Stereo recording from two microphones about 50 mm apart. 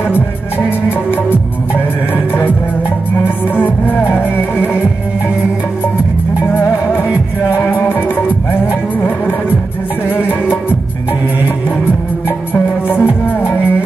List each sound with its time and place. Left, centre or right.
0.1 s music: left
3.5 s music: left
7.5 s music: left
10.0 s music: left
12.5 s music: left